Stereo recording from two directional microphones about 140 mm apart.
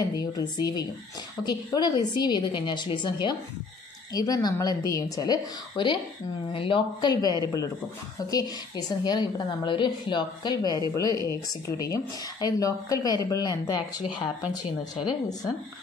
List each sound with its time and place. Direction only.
0.2 s a woman's voice: 30° left (ahead or behind)
15.0 s speech: 25° left (ahead or behind)